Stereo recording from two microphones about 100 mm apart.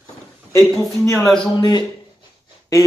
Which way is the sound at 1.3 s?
45° left (ahead or behind).